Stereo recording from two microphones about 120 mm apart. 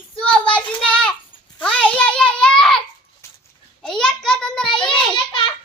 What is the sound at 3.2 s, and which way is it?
Dog, 25° left (ahead or behind).